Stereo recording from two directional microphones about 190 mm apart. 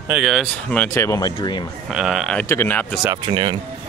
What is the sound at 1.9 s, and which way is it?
Speech, centre (ahead or behind).